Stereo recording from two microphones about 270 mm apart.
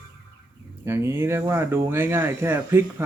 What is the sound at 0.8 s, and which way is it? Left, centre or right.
Speech, centre.